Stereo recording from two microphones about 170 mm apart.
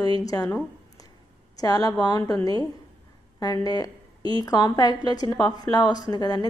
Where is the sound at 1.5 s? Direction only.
20° left (ahead or behind).